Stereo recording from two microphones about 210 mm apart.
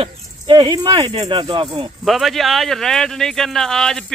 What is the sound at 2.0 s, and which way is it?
Speech, centre (ahead or behind).